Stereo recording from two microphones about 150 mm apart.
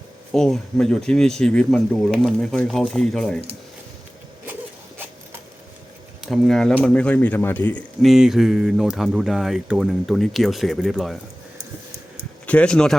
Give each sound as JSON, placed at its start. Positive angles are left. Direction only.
{"t": 0.3, "sound": "speech", "side_deg": 5}
{"t": 6.2, "sound": "speech", "side_deg": 0}
{"t": 8.1, "sound": "speech", "side_deg": 0}
{"t": 12.5, "sound": "speech", "side_deg": 5}